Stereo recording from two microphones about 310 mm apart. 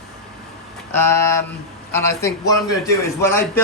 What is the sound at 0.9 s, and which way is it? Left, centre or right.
A man's voice, centre.